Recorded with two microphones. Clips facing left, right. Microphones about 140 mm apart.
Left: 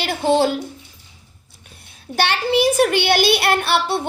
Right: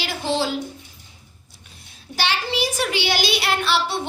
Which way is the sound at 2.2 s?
55° left (ahead or behind).